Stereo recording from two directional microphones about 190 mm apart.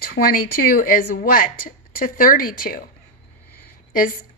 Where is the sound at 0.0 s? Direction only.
50° left (ahead or behind).